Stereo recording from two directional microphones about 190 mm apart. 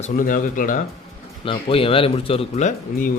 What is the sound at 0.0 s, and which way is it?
Speech, 45° left (ahead or behind).